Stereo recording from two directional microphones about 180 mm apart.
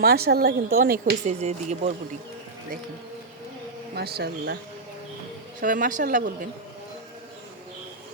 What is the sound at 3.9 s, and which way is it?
Speech, 60° right (ahead or behind).